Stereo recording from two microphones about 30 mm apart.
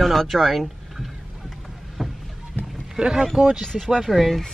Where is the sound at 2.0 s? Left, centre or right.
Centre.